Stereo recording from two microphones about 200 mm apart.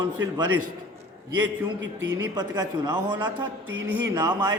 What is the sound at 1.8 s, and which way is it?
Speech, 65° right (ahead or behind).